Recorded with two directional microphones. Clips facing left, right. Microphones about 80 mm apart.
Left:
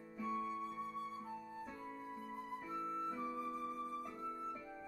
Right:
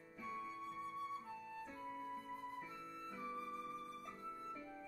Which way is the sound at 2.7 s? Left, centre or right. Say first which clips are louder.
Left 9 dB; left.